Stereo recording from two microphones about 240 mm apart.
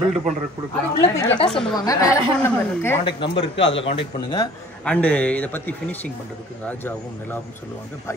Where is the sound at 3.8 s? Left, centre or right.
Centre.